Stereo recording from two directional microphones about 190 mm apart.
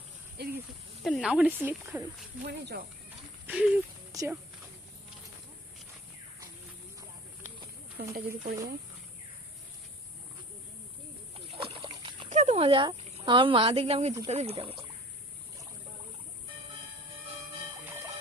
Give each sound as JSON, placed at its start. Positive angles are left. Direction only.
{"t": 0.4, "sound": "snake", "side_deg": -60}
{"t": 1.0, "sound": "speech", "side_deg": 0}
{"t": 2.4, "sound": "speech", "side_deg": -60}
{"t": 3.4, "sound": "a sound", "side_deg": -10}
{"t": 4.1, "sound": "speech", "side_deg": -20}
{"t": 7.9, "sound": "speech", "side_deg": -50}
{"t": 11.3, "sound": "splash", "side_deg": -30}
{"t": 12.3, "sound": "a sound", "side_deg": -35}
{"t": 13.2, "sound": "a woman's voice", "side_deg": -25}